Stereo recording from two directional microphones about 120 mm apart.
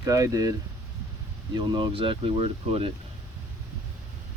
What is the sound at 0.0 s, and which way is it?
Speech, 30° right (ahead or behind).